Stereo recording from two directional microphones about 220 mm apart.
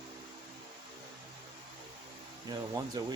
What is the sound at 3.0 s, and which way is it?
Speech, 15° right (ahead or behind).